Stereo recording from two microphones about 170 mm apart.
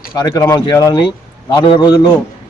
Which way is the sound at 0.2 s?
20° left (ahead or behind).